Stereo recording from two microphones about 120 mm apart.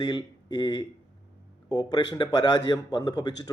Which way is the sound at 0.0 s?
35° left (ahead or behind).